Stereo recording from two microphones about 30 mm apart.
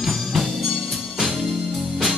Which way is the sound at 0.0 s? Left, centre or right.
Centre.